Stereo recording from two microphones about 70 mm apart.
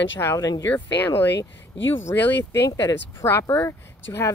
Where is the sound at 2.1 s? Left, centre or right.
Left.